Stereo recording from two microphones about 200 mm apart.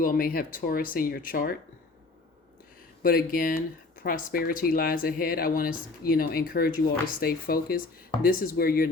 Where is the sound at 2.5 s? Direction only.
45° left (ahead or behind).